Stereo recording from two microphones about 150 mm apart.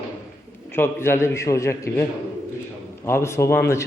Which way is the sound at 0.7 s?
15° left (ahead or behind).